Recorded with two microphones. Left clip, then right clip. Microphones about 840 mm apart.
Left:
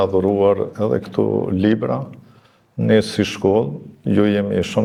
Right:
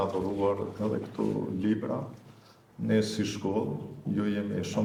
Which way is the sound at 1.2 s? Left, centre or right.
Left.